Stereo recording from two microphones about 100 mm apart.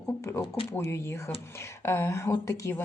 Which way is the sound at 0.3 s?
25° left (ahead or behind).